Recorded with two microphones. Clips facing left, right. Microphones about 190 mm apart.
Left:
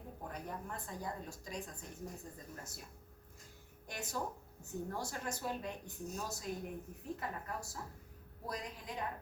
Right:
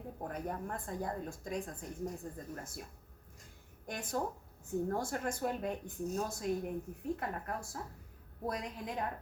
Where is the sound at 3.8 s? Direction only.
50° right (ahead or behind).